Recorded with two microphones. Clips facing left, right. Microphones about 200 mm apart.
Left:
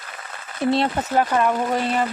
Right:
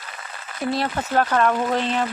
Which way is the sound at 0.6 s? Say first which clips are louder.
Left 4 dB; 30° left (ahead or behind).